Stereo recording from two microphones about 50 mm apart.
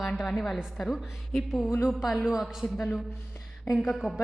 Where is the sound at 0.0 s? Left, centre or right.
Centre.